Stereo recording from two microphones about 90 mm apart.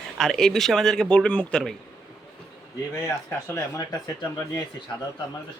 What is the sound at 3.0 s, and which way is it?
Speech, 25° left (ahead or behind).